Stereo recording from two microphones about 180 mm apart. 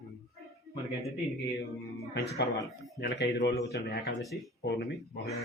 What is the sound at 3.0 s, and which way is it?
Speech, 70° left (ahead or behind).